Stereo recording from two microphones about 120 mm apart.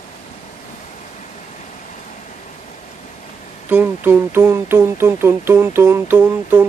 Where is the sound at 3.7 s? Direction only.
15° right (ahead or behind).